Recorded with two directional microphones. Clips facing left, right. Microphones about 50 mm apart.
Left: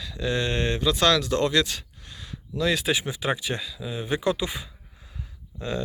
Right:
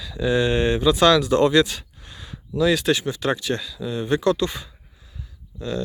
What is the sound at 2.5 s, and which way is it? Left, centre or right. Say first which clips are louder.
Speech: right 5 dB; centre.